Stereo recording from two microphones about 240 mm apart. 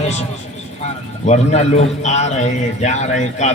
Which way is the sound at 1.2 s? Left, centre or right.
Left.